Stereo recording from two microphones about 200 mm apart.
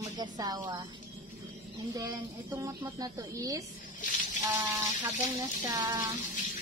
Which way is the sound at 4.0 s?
40° left (ahead or behind).